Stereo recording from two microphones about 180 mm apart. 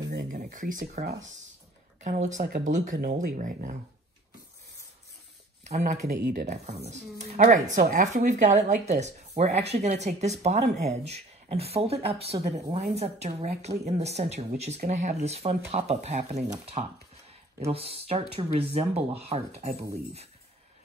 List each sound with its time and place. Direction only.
0.3 s speech: 45° right (ahead or behind)
5.7 s speech: 40° right (ahead or behind)